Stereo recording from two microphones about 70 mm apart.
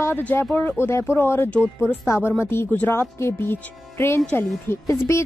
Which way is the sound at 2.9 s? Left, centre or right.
Left.